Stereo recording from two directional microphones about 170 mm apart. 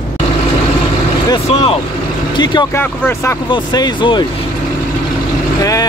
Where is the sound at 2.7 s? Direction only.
15° left (ahead or behind).